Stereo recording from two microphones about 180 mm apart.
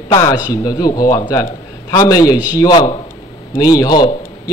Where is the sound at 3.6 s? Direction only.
20° left (ahead or behind).